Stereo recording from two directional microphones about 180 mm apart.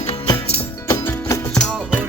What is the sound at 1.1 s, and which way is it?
Music, 20° left (ahead or behind).